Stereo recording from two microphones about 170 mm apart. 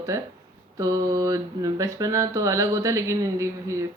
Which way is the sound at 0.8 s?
20° right (ahead or behind).